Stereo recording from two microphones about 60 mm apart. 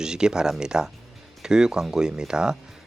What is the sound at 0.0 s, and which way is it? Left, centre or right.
Speech, centre.